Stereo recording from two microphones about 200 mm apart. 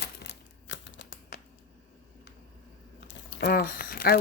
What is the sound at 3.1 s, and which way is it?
Crumpling, 55° left (ahead or behind).